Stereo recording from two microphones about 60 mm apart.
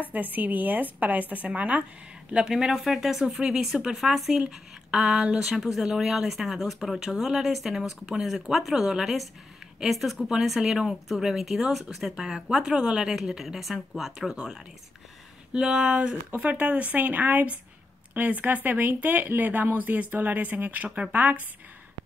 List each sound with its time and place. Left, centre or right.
0.0 s speech: right
2.3 s speech: centre
15.5 s speech: centre; by 21.4 s right